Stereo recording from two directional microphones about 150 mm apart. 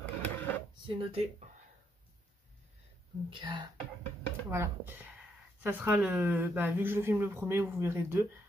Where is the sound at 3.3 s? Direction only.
30° right (ahead or behind).